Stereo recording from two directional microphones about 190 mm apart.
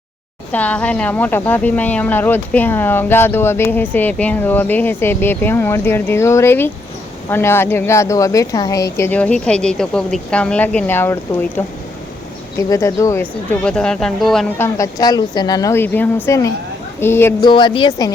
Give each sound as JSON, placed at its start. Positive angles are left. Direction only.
{"t": 0.5, "sound": "speech", "side_deg": 10}
{"t": 12.7, "sound": "speech", "side_deg": 15}
{"t": 13.7, "sound": "speech", "side_deg": 5}
{"t": 14.6, "sound": "speech", "side_deg": 15}
{"t": 17.4, "sound": "a woman's voice", "side_deg": 25}